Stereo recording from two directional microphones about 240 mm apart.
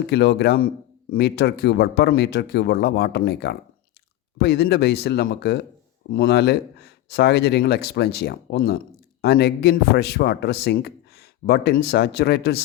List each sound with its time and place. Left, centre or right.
0.1 s a man's voice: left